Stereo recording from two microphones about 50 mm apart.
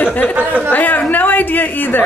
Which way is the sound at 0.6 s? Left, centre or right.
Left.